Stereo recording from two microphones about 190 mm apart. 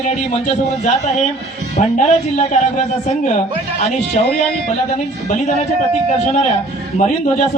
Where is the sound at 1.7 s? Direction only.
40° left (ahead or behind).